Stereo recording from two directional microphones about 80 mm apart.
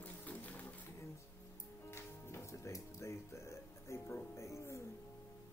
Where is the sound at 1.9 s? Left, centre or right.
Left.